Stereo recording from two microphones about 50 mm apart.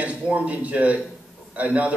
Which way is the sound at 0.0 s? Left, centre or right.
Right.